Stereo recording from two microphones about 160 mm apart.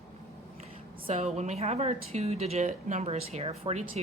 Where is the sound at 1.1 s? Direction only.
40° right (ahead or behind).